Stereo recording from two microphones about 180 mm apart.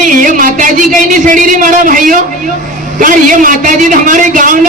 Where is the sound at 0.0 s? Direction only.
45° right (ahead or behind).